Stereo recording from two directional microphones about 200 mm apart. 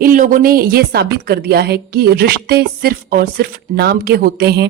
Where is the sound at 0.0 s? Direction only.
40° right (ahead or behind).